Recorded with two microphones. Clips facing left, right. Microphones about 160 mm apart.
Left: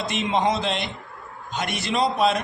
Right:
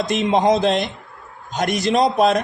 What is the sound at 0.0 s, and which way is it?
Speech, 45° right (ahead or behind).